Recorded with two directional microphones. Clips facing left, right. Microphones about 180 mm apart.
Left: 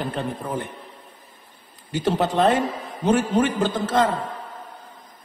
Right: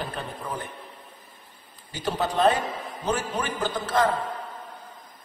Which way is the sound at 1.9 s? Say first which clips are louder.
Left 6 dB; 20° left (ahead or behind).